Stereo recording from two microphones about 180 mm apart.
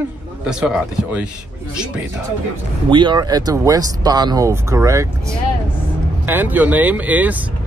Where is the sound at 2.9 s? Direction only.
25° right (ahead or behind).